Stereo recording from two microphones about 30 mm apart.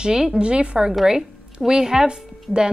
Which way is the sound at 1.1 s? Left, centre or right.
Right.